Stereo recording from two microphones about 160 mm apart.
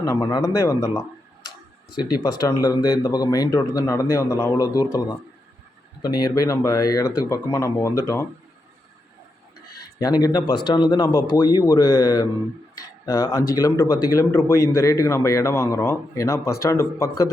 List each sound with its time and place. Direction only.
0.0 s speech: 20° left (ahead or behind)
10.0 s speech: 25° left (ahead or behind)